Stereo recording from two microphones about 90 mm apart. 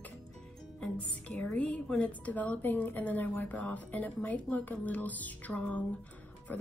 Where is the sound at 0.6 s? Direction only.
5° left (ahead or behind).